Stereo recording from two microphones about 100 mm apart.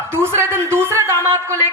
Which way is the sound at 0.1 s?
25° right (ahead or behind).